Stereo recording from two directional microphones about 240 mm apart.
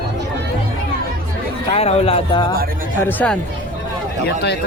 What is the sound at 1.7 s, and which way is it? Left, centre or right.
Speech, left.